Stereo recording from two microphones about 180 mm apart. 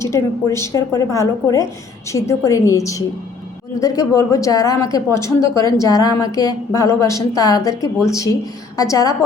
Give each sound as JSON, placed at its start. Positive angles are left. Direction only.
{"t": 0.0, "sound": "a woman's voice", "side_deg": 15}